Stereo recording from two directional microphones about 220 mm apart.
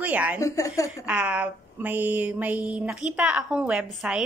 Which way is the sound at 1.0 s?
5° right (ahead or behind).